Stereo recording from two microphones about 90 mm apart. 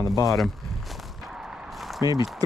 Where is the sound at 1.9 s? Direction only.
40° right (ahead or behind).